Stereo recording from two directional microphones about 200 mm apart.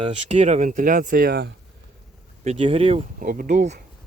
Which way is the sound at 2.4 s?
30° right (ahead or behind).